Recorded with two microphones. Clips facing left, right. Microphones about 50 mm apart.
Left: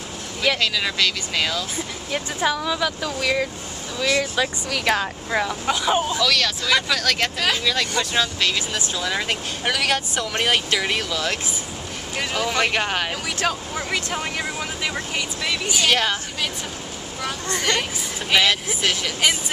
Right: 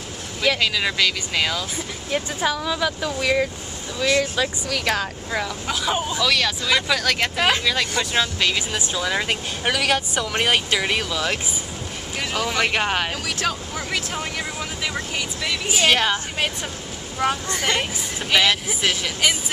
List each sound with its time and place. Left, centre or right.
0.6 s speech: centre
4.2 s speech: centre
6.2 s speech: centre
7.3 s speech: right
7.6 s speech: centre
15.7 s speech: centre
17.5 s speech: centre